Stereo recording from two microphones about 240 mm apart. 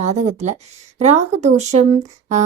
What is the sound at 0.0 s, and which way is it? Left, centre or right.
Speech, right.